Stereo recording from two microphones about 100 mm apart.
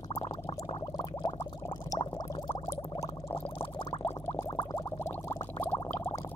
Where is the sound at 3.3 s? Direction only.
60° left (ahead or behind).